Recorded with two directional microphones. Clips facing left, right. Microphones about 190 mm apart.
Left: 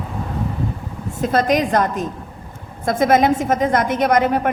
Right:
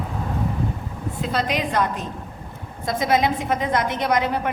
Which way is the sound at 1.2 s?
45° left (ahead or behind).